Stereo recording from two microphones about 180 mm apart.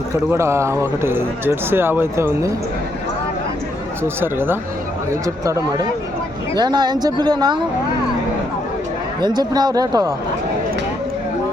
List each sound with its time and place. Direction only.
0.3 s speech: 15° right (ahead or behind)
4.0 s a woman's voice: 10° right (ahead or behind)
9.2 s a woman's voice: 25° right (ahead or behind)